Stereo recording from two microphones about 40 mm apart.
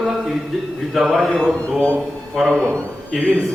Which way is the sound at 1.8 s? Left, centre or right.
Left.